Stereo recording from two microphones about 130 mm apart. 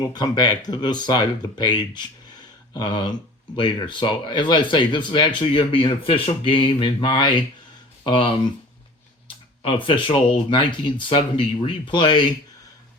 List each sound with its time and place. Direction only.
0.0 s speech: 30° left (ahead or behind)